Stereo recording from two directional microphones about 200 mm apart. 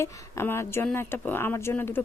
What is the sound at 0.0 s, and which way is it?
Speech, 10° left (ahead or behind).